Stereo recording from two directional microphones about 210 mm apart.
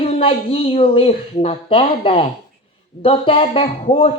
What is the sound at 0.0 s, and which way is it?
Speech, 25° left (ahead or behind).